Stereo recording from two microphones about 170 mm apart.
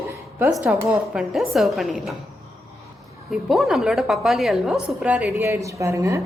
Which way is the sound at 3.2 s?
Centre (ahead or behind).